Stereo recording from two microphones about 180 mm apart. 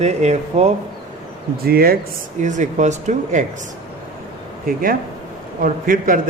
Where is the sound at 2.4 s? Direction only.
40° right (ahead or behind).